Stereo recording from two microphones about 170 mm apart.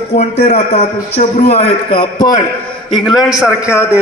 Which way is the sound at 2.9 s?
Centre (ahead or behind).